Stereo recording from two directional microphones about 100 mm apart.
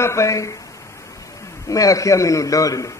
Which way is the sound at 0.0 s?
30° left (ahead or behind).